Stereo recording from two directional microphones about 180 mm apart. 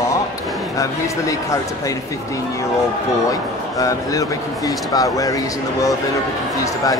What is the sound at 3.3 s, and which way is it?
Speech, 20° left (ahead or behind).